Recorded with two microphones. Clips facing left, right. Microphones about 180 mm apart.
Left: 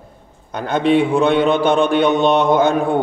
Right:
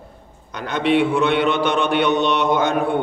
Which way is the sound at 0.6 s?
45° left (ahead or behind).